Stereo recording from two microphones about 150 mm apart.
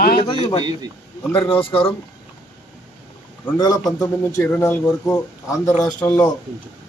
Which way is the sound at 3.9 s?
20° left (ahead or behind).